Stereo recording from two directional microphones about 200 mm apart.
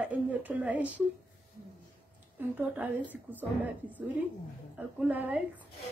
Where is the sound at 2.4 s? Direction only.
10° right (ahead or behind).